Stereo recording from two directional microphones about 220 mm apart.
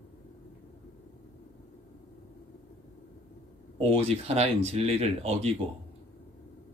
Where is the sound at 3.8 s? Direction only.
30° right (ahead or behind).